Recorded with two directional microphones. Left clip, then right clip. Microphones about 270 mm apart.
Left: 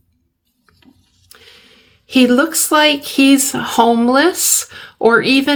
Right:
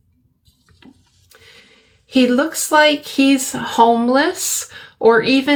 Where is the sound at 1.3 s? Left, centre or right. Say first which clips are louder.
Left 2 dB; left.